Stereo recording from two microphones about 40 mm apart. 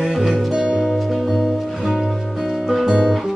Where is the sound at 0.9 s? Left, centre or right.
Centre.